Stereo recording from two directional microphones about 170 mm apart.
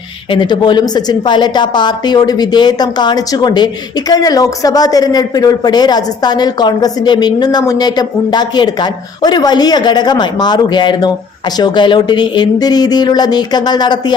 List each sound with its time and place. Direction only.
0.3 s speech: 30° left (ahead or behind)